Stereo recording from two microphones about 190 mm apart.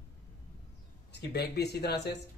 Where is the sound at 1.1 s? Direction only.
60° left (ahead or behind).